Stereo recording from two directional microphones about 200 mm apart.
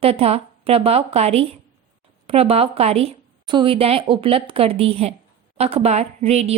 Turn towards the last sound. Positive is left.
turn(degrees=-30)  # may be behind; listen again after turning